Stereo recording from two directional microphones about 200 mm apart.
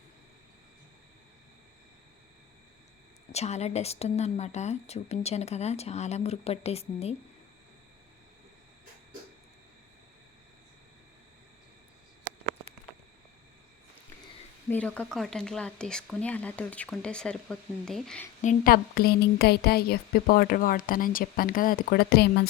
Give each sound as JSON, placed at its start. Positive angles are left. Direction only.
{"t": 3.3, "sound": "speech", "side_deg": 35}
{"t": 14.7, "sound": "speech", "side_deg": 5}
{"t": 18.4, "sound": "a woman's voice", "side_deg": 45}